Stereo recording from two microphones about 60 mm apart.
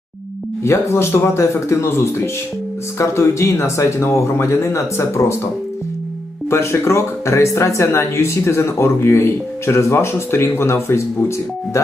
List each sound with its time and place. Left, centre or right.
0.7 s speech: left
6.5 s speech: left